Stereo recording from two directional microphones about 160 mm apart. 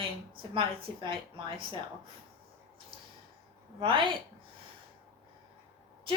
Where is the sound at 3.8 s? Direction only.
30° right (ahead or behind).